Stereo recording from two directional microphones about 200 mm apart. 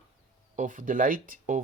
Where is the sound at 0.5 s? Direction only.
40° right (ahead or behind).